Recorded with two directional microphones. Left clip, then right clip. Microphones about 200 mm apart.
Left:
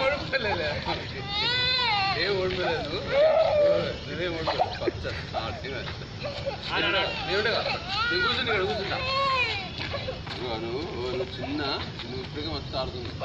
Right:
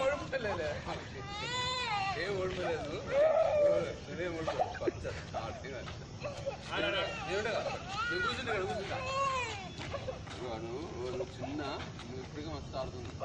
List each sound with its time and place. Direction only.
0.0 s speech: 10° right (ahead or behind)
7.2 s speech: 5° right (ahead or behind)